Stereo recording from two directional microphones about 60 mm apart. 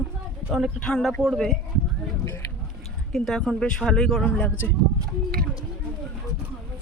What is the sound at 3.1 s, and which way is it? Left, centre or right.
Speech, centre.